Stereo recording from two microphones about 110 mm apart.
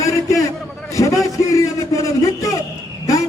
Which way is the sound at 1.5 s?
30° left (ahead or behind).